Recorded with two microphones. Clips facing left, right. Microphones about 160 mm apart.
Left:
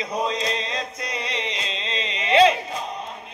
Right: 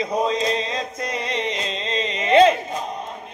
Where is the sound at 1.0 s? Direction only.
50° right (ahead or behind).